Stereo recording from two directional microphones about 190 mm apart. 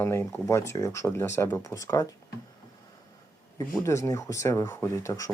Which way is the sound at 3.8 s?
15° left (ahead or behind).